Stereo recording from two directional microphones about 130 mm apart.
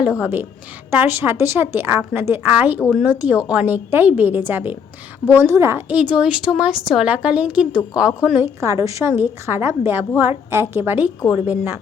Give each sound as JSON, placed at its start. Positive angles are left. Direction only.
{"t": 0.0, "sound": "a woman's voice", "side_deg": -10}
{"t": 8.4, "sound": "a woman's voice", "side_deg": -25}